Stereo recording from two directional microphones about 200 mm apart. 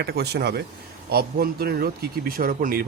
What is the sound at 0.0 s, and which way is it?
Speech, 55° right (ahead or behind).